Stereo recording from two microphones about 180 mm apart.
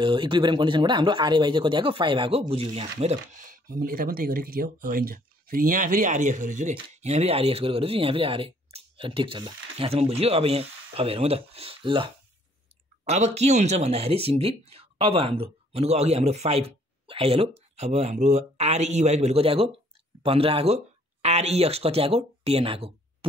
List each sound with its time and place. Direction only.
0.0 s speech: 25° right (ahead or behind)